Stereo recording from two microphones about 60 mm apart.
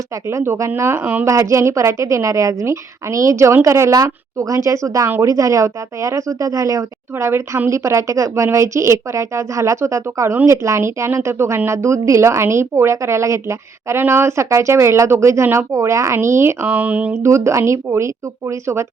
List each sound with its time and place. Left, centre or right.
0.3 s speech: right
1.2 s a woman's voice: right
7.3 s speech: right
7.7 s a woman's voice: right
16.6 s speech: right
17.2 s speech: right